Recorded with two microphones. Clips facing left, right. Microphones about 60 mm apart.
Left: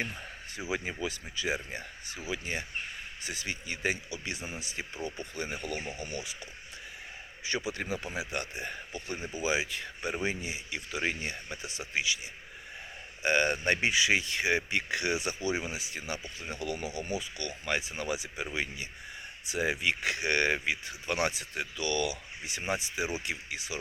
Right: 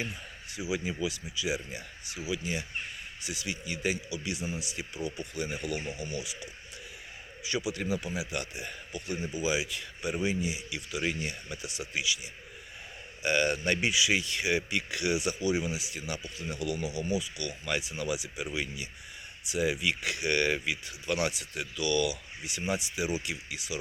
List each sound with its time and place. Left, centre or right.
0.0 s speech: left
13.2 s speech: left